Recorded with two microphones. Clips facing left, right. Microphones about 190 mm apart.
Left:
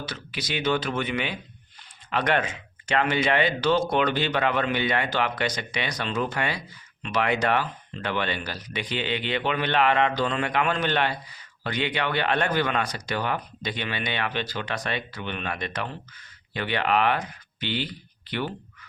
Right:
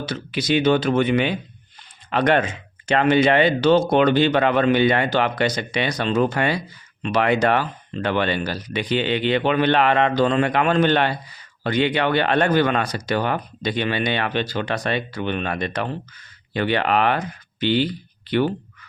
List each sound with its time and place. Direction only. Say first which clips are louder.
0.0 s speech: right 9 dB; 25° right (ahead or behind)